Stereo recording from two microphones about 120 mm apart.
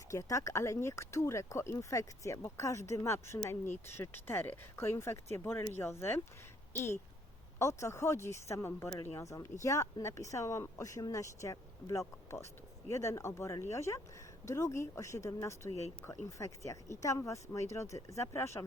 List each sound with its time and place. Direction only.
0.1 s speech: 25° left (ahead or behind)